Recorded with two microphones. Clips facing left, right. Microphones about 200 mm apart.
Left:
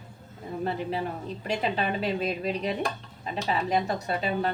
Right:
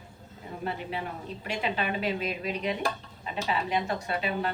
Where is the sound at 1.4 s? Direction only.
35° left (ahead or behind).